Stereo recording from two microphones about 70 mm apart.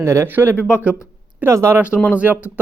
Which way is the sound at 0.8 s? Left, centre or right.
Centre.